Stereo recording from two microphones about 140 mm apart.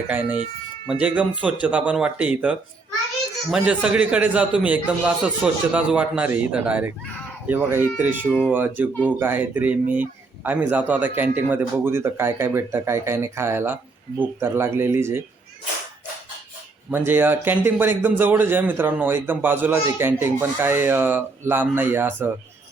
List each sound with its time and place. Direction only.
0.1 s a man's voice: 10° right (ahead or behind)
7.0 s a sound: 10° left (ahead or behind)
7.4 s a man's voice: 15° right (ahead or behind)
16.9 s a man's voice: 15° right (ahead or behind)